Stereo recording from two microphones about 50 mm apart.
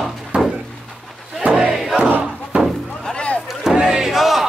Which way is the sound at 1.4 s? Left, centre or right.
Right.